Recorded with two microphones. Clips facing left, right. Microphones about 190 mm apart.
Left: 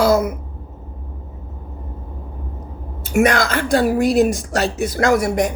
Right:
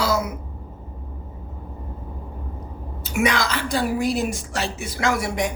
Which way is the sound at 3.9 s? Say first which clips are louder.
Left 9 dB; 70° left (ahead or behind).